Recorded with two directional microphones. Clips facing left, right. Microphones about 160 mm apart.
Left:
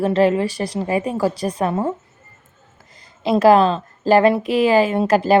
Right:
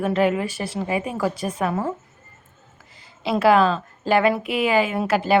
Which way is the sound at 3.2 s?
40° left (ahead or behind).